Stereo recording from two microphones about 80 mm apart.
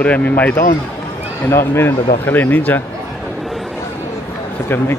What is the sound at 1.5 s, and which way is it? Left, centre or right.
A man's voice, left.